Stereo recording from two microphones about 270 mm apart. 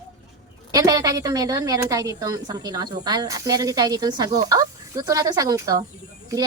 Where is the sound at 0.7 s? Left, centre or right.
Centre.